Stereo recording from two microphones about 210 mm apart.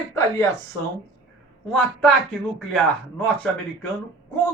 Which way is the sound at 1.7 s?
5° left (ahead or behind).